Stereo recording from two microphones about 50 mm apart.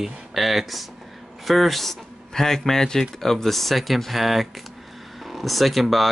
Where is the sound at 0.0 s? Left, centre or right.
Centre.